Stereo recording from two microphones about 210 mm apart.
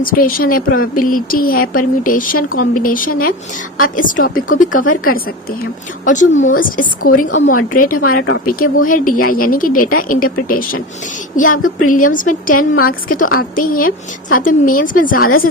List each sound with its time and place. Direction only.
0.0 s a woman's voice: 40° left (ahead or behind)